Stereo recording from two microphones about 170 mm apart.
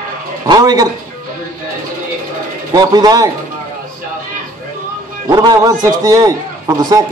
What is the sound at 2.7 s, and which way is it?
Speech, 20° right (ahead or behind).